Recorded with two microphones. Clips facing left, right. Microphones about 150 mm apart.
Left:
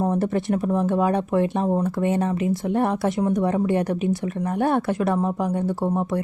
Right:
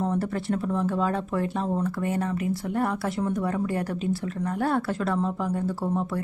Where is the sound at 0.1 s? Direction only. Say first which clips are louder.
Left 5 dB; 20° left (ahead or behind).